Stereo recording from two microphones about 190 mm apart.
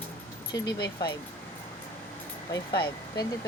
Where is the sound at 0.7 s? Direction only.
60° left (ahead or behind).